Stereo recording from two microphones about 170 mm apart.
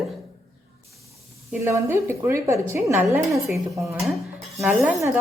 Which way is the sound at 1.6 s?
15° right (ahead or behind).